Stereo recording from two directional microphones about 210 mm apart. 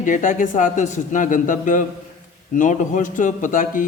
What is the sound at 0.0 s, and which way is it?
Speech, 40° left (ahead or behind).